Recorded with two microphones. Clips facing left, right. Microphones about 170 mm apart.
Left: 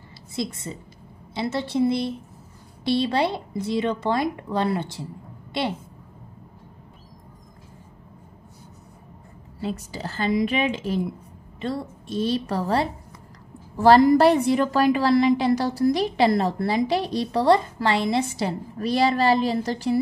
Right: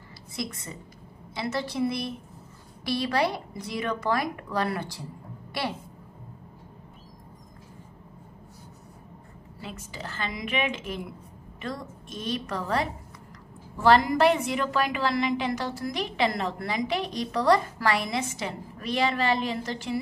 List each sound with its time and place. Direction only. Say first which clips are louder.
0.4 s a woman's voice: left 5 dB; 25° left (ahead or behind)
9.6 s a woman's voice: left 9 dB; 35° left (ahead or behind)